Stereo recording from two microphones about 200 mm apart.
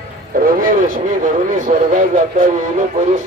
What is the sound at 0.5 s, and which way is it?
Vehicle, 45° right (ahead or behind).